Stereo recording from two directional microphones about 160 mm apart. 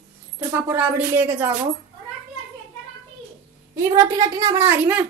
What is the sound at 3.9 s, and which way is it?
A woman's voice, 20° right (ahead or behind).